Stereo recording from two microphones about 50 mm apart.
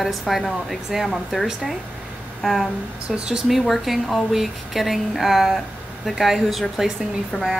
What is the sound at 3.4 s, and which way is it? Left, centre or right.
Speech, centre.